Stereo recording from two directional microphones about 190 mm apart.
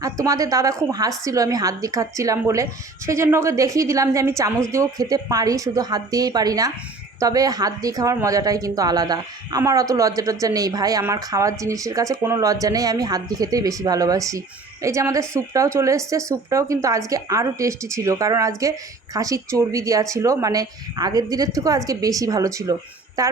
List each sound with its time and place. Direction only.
0.0 s a woman's voice: 20° right (ahead or behind)